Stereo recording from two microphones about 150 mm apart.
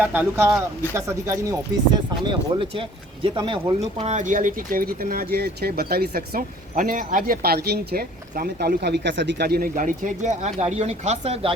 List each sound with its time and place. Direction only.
0.0 s speech: 10° right (ahead or behind)
2.2 s speech: 35° right (ahead or behind)
3.8 s speech: 45° right (ahead or behind)